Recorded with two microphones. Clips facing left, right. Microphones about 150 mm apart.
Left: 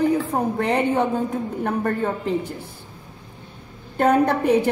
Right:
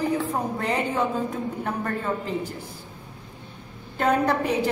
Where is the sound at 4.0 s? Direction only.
55° left (ahead or behind).